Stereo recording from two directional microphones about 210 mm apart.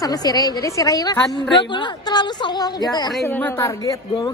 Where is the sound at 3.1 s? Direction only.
10° left (ahead or behind).